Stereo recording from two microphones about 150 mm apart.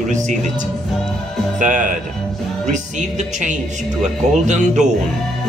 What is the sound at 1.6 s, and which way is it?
A woman's voice, 60° right (ahead or behind).